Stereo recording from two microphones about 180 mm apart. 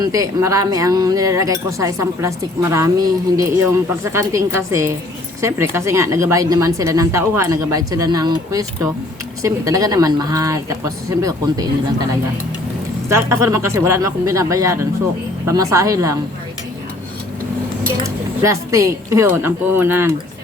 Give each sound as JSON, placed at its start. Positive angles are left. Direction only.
{"t": 0.0, "sound": "speech", "side_deg": -20}
{"t": 13.1, "sound": "speech", "side_deg": -15}
{"t": 18.0, "sound": "speech", "side_deg": -15}